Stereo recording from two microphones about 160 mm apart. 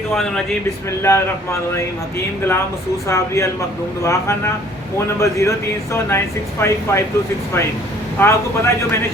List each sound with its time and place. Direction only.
0.1 s a man's voice: centre (ahead or behind)
1.0 s speech: 20° left (ahead or behind)
3.1 s speech: 20° left (ahead or behind)
8.2 s speech: 15° left (ahead or behind)